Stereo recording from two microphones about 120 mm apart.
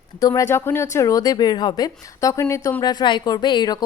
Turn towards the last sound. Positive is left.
turn(degrees=35)  # may be behind; listen again after turning